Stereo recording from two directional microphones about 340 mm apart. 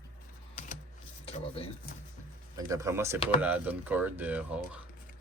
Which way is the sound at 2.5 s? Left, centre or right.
Centre.